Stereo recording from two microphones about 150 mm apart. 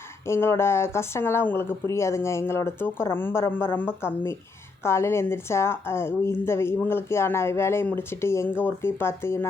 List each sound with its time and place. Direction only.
0.3 s a woman's voice: 15° left (ahead or behind)